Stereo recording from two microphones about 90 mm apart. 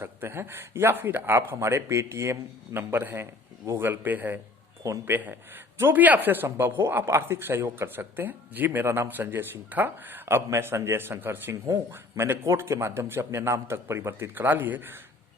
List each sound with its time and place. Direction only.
0.0 s speech: 25° right (ahead or behind)